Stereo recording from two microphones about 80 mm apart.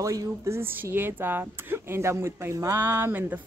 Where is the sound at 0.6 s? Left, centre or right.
Right.